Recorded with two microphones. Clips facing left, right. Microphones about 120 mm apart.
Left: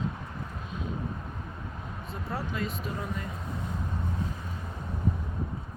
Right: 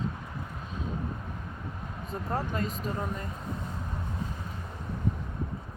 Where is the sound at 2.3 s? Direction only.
40° right (ahead or behind).